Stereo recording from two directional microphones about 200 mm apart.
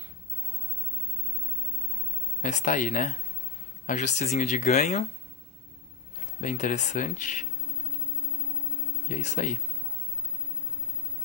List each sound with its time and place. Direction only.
2.4 s speech: 40° left (ahead or behind)
6.4 s speech: 40° left (ahead or behind)
9.1 s speech: 40° left (ahead or behind)